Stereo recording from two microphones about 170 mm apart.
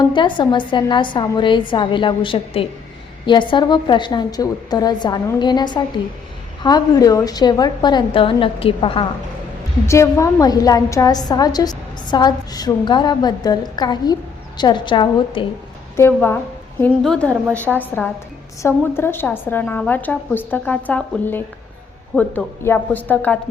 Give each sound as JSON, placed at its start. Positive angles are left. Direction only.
{"t": 0.0, "sound": "a woman's voice", "side_deg": 25}
{"t": 9.8, "sound": "a woman's voice", "side_deg": 15}
{"t": 16.0, "sound": "a woman's voice", "side_deg": 15}